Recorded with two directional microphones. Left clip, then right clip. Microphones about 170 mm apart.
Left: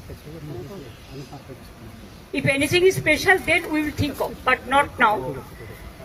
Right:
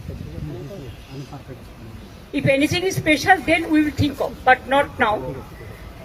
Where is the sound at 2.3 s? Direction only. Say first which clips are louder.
Right 2 dB; 25° left (ahead or behind).